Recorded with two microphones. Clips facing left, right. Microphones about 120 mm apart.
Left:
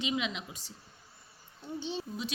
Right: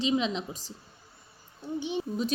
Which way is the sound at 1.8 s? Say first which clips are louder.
Right 5 dB; 15° right (ahead or behind).